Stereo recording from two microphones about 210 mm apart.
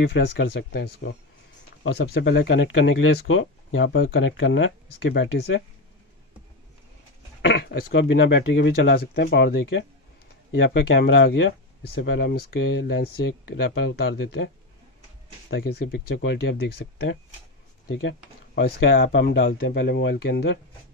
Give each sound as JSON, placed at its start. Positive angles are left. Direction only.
{"t": 0.1, "sound": "speech", "side_deg": 50}
{"t": 7.4, "sound": "speech", "side_deg": 50}
{"t": 15.5, "sound": "speech", "side_deg": 50}